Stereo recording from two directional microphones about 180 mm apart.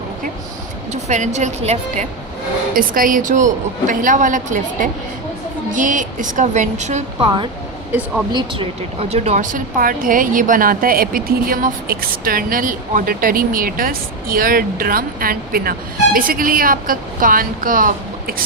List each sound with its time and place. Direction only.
1.0 s a woman's voice: 40° right (ahead or behind)
2.7 s speech: 50° right (ahead or behind)
8.3 s speech: 25° right (ahead or behind); by 18.4 s 50° right (ahead or behind)